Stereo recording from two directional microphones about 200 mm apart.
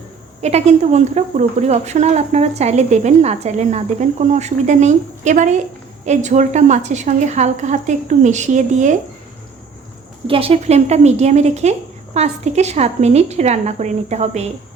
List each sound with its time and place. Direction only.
0.4 s speech: 35° right (ahead or behind)
10.2 s speech: 30° right (ahead or behind)